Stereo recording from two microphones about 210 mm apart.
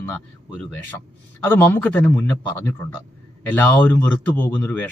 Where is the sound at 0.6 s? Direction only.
10° left (ahead or behind).